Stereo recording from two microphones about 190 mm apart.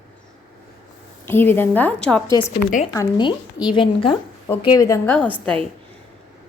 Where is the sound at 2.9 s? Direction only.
25° left (ahead or behind).